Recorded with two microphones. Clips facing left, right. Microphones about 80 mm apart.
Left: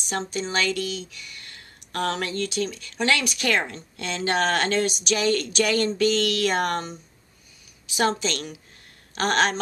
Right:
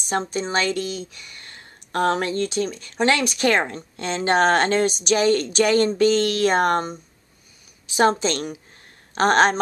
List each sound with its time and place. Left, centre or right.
0.3 s speech: right